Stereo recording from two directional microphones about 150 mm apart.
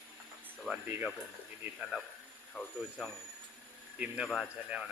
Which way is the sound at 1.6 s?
5° right (ahead or behind).